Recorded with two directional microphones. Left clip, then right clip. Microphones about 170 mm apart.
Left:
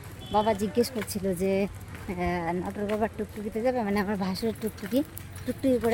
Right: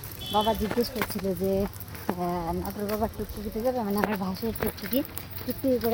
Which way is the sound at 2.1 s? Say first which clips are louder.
Left 3 dB; 20° left (ahead or behind).